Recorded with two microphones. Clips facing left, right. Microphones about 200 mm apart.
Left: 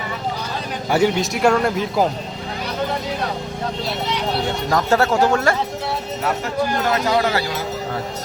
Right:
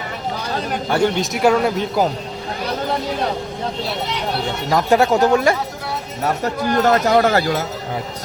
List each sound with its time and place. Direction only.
0.9 s a man's voice: 10° left (ahead or behind)
4.7 s speech: 15° right (ahead or behind)
6.4 s speech: 45° right (ahead or behind)